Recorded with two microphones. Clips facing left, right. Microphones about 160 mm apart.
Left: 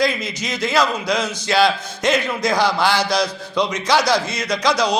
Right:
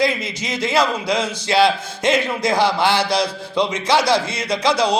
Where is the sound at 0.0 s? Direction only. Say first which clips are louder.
Even; 25° right (ahead or behind).